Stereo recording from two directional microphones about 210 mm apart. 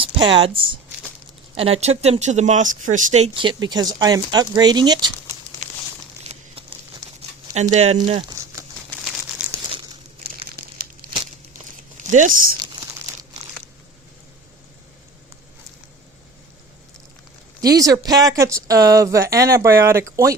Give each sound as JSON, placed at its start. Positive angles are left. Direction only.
{"t": 0.0, "sound": "speech", "side_deg": -25}
{"t": 1.8, "sound": "speech", "side_deg": -30}
{"t": 6.2, "sound": "a sound", "side_deg": -25}
{"t": 7.9, "sound": "speech", "side_deg": -20}
{"t": 9.4, "sound": "crumpling", "side_deg": -5}
{"t": 11.0, "sound": "crumpling", "side_deg": -40}
{"t": 11.9, "sound": "speech", "side_deg": -35}
{"t": 17.6, "sound": "speech", "side_deg": -15}